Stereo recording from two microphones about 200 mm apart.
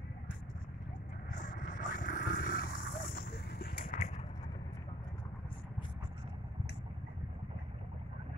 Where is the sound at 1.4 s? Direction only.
40° left (ahead or behind).